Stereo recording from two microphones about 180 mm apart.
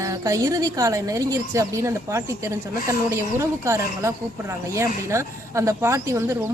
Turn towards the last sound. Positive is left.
turn(degrees=-15)  # may be behind; listen again after turning